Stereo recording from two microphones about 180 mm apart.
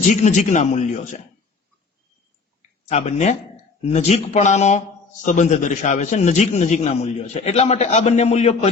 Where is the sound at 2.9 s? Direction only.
35° left (ahead or behind).